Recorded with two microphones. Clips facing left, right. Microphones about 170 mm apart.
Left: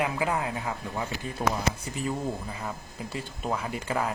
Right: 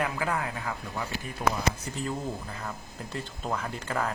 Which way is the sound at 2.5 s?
10° left (ahead or behind).